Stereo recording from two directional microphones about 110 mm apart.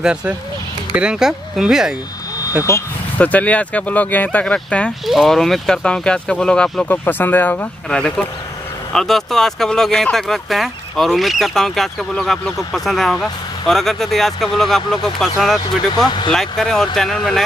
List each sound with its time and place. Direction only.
0.0 s speech: 10° right (ahead or behind)
2.7 s speech: 25° left (ahead or behind)
3.2 s speech: 15° left (ahead or behind)
5.0 s speech: centre (ahead or behind)